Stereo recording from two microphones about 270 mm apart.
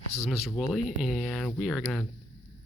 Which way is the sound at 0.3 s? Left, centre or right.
Centre.